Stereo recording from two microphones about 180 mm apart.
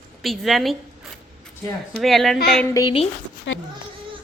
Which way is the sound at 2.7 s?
20° left (ahead or behind).